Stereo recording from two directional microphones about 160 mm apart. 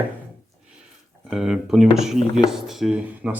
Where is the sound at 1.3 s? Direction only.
5° right (ahead or behind).